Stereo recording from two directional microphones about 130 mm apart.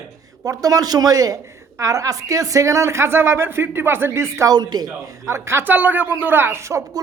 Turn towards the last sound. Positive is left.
turn(degrees=-25)  # may be behind; listen again after turning